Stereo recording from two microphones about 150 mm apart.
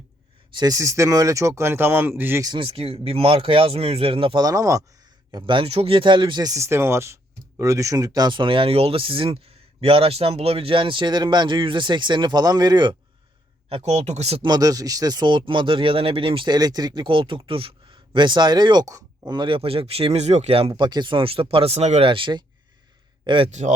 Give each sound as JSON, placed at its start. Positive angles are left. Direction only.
{"t": 0.5, "sound": "speech", "side_deg": -25}
{"t": 2.4, "sound": "speech", "side_deg": -30}
{"t": 4.4, "sound": "speech", "side_deg": -20}
{"t": 5.3, "sound": "speech", "side_deg": -35}
{"t": 13.7, "sound": "speech", "side_deg": -45}
{"t": 14.4, "sound": "speech", "side_deg": -25}
{"t": 23.5, "sound": "speech", "side_deg": -50}